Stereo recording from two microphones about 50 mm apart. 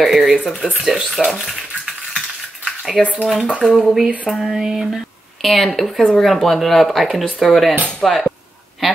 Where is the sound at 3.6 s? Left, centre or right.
Centre.